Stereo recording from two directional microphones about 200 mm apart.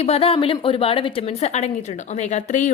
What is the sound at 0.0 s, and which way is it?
A woman's voice, 30° left (ahead or behind).